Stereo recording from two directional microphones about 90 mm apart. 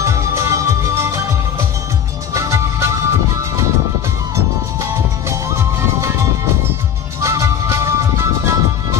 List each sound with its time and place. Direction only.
0.0 s music: 35° right (ahead or behind)
2.3 s music: 35° right (ahead or behind)
5.3 s music: 30° right (ahead or behind)
7.2 s music: 35° right (ahead or behind)